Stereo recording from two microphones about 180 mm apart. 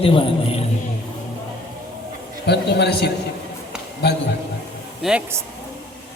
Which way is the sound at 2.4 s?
65° left (ahead or behind).